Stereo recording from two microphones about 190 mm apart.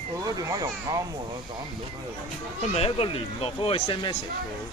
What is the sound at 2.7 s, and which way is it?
Speech, 30° left (ahead or behind).